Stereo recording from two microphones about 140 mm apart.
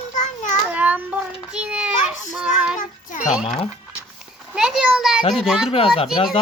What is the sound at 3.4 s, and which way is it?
Speech, 45° left (ahead or behind).